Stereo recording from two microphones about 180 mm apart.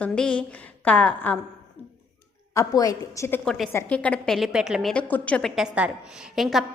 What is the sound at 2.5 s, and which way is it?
A woman's voice, 20° left (ahead or behind).